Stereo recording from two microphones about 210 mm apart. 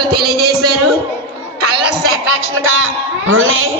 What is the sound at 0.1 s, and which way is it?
Music, 50° right (ahead or behind).